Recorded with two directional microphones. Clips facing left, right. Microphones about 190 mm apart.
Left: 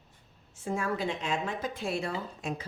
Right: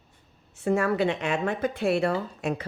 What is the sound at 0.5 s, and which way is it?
Speech, 70° right (ahead or behind).